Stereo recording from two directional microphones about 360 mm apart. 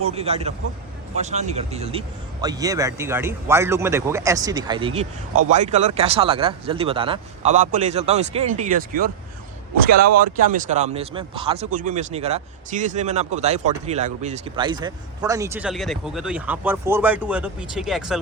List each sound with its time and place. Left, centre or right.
0.0 s speech: centre